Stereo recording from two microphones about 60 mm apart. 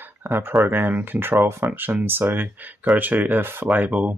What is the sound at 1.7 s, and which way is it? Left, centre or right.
Speech, right.